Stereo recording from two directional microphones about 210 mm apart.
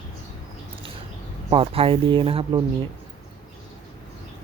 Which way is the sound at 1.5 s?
25° right (ahead or behind).